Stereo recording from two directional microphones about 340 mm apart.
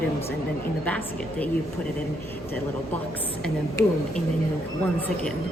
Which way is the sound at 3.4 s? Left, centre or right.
Centre.